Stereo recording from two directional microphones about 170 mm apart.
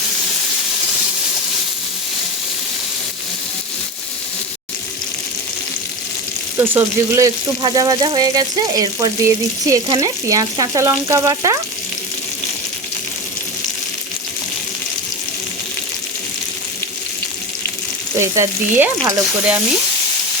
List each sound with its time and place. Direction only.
6.6 s speech: 15° right (ahead or behind)
18.2 s speech: 15° right (ahead or behind)